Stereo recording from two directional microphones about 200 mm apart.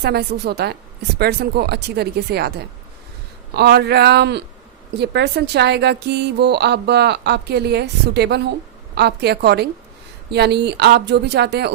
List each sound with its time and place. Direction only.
0.0 s speech: 55° right (ahead or behind)